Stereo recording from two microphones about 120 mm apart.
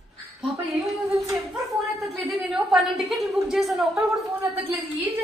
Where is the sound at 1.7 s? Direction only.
Centre (ahead or behind).